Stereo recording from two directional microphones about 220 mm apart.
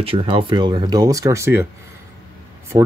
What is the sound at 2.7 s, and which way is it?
Speech, 15° right (ahead or behind).